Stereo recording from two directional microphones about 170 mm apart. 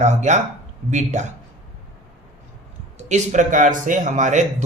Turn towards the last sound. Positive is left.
turn(degrees=-45)  # may be behind; listen again after turning